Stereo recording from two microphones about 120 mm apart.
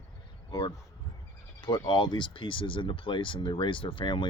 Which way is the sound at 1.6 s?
40° left (ahead or behind).